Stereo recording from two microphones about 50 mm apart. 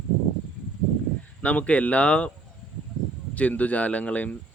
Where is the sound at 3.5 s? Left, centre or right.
Left.